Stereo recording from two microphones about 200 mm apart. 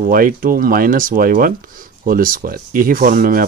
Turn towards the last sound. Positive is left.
turn(degrees=-45)  # may be behind; listen again after turning